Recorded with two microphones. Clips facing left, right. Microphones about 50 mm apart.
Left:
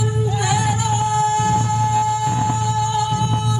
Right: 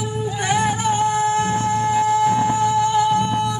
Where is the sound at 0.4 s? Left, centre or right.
Right.